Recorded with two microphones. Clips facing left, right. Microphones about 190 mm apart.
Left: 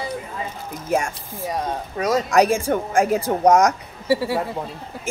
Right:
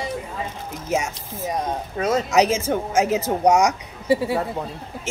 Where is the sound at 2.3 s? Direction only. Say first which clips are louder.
Left 3 dB; 5° right (ahead or behind).